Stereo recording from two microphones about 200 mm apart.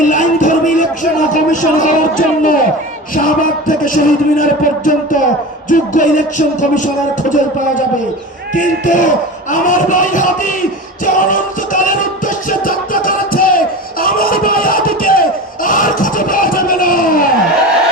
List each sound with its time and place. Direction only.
0.0 s music: 40° left (ahead or behind)